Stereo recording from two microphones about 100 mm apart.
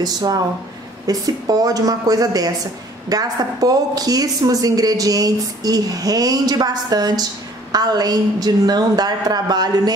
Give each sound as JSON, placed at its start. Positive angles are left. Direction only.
{"t": 0.0, "sound": "a woman's voice", "side_deg": -40}